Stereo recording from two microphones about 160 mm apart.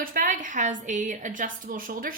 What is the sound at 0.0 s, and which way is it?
A woman's voice, 60° right (ahead or behind).